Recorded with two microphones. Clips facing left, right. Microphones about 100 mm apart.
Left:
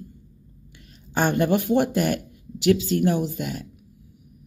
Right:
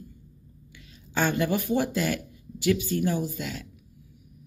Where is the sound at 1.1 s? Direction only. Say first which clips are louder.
Left 4 dB; 55° left (ahead or behind).